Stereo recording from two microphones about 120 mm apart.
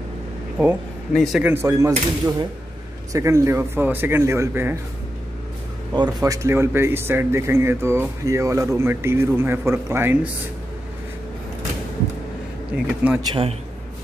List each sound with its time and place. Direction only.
1.1 s speech: centre (ahead or behind)
1.4 s speech: 20° right (ahead or behind)
6.2 s speech: 25° right (ahead or behind)
12.7 s speech: 10° right (ahead or behind)
13.3 s a man's voice: 50° right (ahead or behind)